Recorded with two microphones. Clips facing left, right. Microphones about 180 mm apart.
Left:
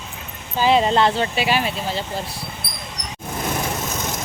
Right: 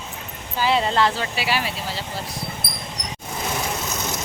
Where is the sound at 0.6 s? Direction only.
20° left (ahead or behind).